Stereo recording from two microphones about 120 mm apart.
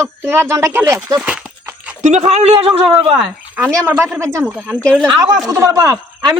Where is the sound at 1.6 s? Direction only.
10° right (ahead or behind).